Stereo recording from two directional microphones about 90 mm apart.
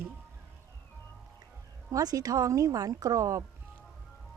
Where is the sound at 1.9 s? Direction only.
40° right (ahead or behind).